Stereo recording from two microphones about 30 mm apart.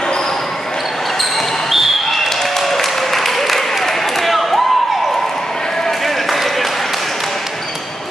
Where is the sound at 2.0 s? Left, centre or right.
Centre.